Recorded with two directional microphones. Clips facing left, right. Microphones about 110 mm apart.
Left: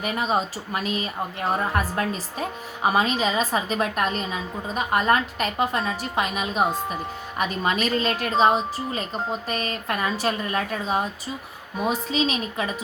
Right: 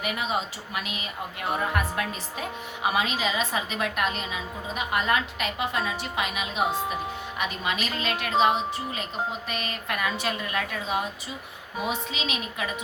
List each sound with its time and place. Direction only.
0.0 s a woman's voice: 35° left (ahead or behind)